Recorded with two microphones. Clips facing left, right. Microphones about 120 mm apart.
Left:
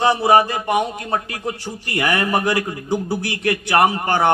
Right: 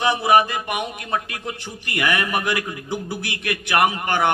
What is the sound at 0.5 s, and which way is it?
Speech, 20° left (ahead or behind).